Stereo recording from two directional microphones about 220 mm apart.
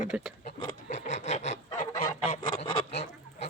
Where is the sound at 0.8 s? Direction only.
35° left (ahead or behind).